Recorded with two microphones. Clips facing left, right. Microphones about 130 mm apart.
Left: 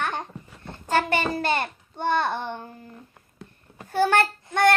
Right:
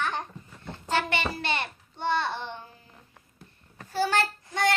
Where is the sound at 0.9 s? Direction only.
45° left (ahead or behind).